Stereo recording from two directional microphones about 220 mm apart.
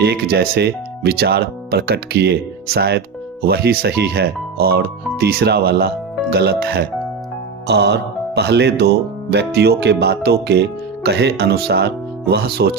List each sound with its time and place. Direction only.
0.0 s speech: 50° right (ahead or behind)